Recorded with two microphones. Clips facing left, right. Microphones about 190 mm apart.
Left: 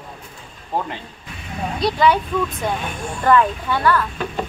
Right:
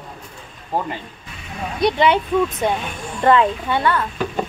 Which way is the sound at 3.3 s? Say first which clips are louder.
Right 1 dB; 20° right (ahead or behind).